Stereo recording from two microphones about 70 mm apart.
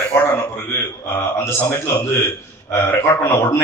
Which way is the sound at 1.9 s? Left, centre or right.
Left.